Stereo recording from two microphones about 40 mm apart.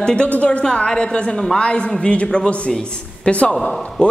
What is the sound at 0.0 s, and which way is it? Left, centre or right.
A man's voice, left.